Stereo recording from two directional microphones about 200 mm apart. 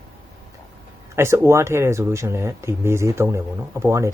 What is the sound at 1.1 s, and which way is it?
Speech, 10° right (ahead or behind).